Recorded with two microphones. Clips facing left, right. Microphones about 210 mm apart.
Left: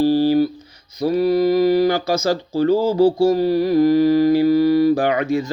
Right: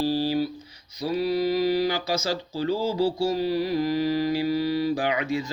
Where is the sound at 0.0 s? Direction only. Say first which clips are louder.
Left 9 dB; 55° left (ahead or behind).